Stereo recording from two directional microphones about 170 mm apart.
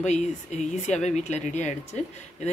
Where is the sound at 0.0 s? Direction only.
45° left (ahead or behind).